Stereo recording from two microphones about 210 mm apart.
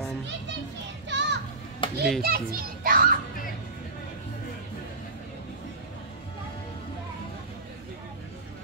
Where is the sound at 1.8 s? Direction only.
20° left (ahead or behind).